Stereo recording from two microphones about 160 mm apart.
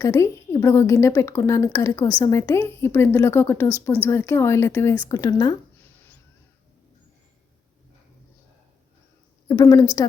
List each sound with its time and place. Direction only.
0.0 s a woman's voice: 20° left (ahead or behind)
9.5 s a woman's voice: 20° left (ahead or behind)